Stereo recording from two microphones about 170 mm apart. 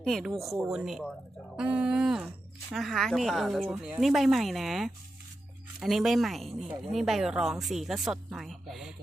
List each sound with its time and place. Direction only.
0.0 s speech: centre (ahead or behind)